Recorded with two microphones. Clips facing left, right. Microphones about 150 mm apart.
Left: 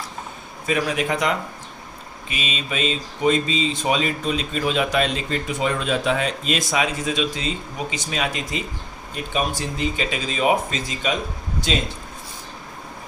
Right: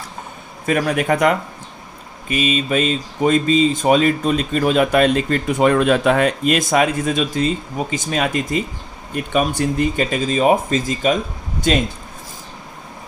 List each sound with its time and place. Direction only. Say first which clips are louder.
0.6 s speech: right 4 dB; 50° right (ahead or behind)